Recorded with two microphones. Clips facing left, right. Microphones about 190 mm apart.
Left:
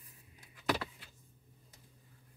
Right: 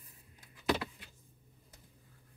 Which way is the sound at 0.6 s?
20° right (ahead or behind).